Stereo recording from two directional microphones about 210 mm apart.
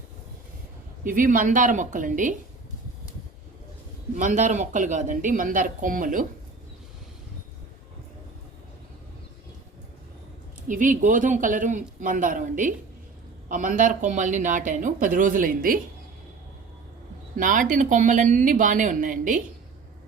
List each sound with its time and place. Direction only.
1.0 s speech: 40° right (ahead or behind)
4.1 s speech: 35° right (ahead or behind)
10.7 s speech: 40° right (ahead or behind)
17.3 s speech: 40° right (ahead or behind)